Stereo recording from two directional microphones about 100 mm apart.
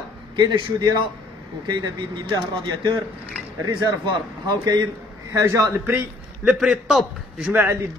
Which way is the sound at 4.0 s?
50° right (ahead or behind).